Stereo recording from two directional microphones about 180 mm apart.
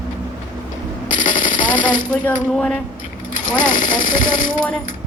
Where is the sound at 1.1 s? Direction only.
45° left (ahead or behind).